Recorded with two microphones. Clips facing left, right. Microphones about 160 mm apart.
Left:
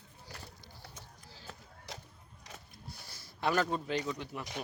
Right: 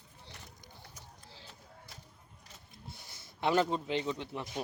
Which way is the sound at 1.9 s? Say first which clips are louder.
Left 13 dB; 90° left.